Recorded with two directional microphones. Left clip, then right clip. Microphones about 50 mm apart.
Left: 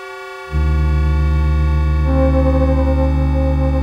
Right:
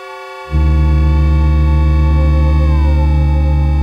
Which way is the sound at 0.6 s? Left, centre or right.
Right.